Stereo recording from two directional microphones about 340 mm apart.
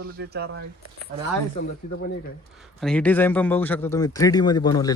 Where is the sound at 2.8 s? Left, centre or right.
Centre.